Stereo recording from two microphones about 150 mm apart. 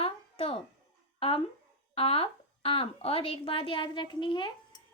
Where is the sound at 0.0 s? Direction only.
35° left (ahead or behind).